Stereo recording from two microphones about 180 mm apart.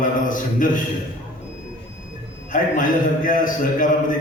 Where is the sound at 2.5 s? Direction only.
45° left (ahead or behind).